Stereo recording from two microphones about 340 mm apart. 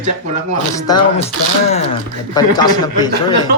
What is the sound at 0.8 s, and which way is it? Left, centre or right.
Speech, centre.